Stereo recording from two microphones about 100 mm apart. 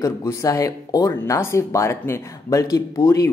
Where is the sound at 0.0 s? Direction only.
30° left (ahead or behind).